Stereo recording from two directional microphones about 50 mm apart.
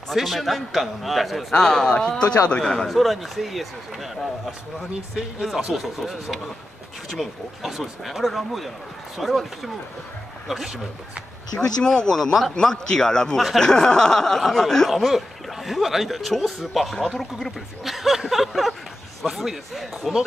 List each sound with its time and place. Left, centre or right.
0.1 s speech: centre
2.9 s speech: centre
11.5 s speech: centre